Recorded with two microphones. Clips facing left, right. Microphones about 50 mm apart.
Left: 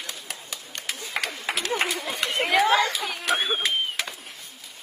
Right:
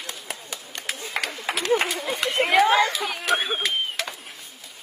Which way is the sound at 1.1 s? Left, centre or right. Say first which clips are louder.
Right 1 dB; centre.